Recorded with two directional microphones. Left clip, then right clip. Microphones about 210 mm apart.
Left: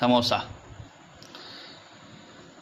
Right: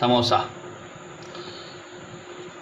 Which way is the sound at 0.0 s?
45° left (ahead or behind).